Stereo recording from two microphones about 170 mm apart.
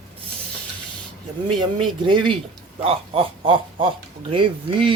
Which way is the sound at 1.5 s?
30° right (ahead or behind).